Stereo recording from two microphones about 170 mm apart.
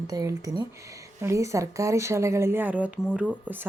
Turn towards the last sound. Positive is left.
turn(degrees=-10)  # may be behind; listen again after turning